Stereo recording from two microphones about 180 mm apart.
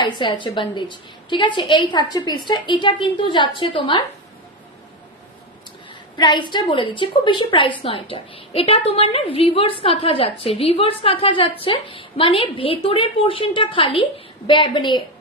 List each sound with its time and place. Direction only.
0.0 s a woman's voice: 25° left (ahead or behind)
6.1 s a woman's voice: 25° left (ahead or behind)